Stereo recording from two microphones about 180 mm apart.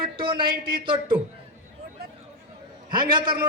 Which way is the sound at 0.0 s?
30° right (ahead or behind).